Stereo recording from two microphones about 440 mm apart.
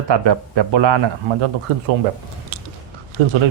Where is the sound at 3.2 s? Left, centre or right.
Right.